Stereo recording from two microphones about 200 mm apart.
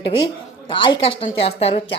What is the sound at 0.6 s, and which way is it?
A woman's voice, 25° left (ahead or behind).